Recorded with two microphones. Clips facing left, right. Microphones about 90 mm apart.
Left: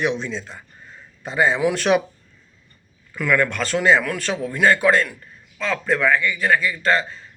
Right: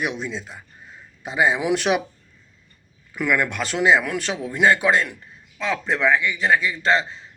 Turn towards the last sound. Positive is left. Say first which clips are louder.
# even
turn(degrees=-20)  # may be behind; listen again after turning